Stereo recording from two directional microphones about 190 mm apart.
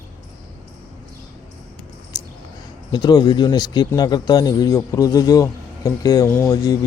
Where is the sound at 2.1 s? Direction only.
20° left (ahead or behind).